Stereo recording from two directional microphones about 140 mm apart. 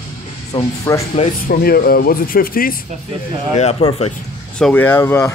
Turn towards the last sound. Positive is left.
turn(degrees=20)  # may be behind; listen again after turning